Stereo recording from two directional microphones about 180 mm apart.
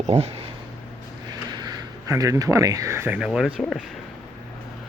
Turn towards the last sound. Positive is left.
turn(degrees=-5)  # may be behind; listen again after turning